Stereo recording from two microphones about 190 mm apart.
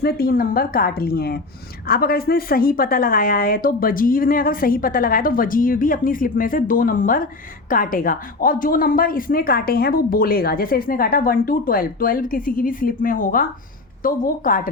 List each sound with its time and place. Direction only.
0.0 s a woman's voice: 50° left (ahead or behind)